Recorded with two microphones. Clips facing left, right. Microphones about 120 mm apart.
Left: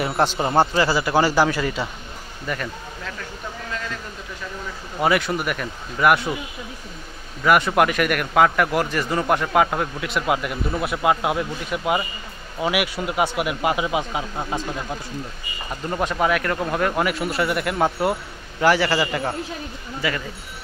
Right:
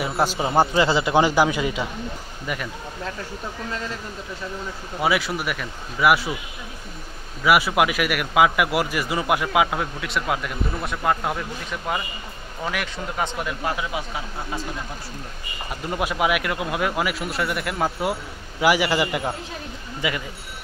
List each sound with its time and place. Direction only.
0.2 s a man's voice: 5° right (ahead or behind)
0.7 s a man's voice: 20° right (ahead or behind)
5.0 s a man's voice: centre (ahead or behind)
7.4 s a man's voice: 5° right (ahead or behind); by 14.6 s 20° left (ahead or behind)
15.7 s a man's voice: 5° right (ahead or behind)
18.6 s a man's voice: 15° right (ahead or behind)